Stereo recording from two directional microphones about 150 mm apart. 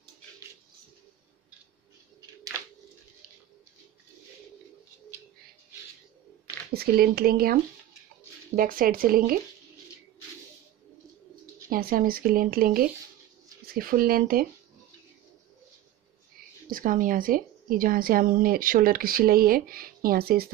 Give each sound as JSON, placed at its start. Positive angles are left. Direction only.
{"t": 6.7, "sound": "a woman's voice", "side_deg": -90}
{"t": 11.7, "sound": "a woman's voice", "side_deg": -80}
{"t": 16.6, "sound": "a woman's voice", "side_deg": -65}